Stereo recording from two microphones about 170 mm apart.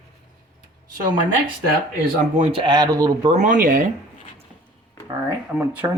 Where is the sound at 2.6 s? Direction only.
25° right (ahead or behind).